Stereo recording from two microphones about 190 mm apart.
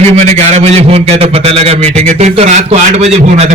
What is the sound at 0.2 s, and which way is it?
A man's voice, 35° right (ahead or behind).